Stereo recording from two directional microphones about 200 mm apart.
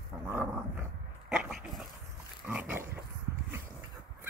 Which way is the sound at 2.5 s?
10° right (ahead or behind).